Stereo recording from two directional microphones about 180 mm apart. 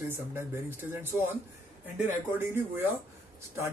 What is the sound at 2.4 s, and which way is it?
Speech, 10° right (ahead or behind).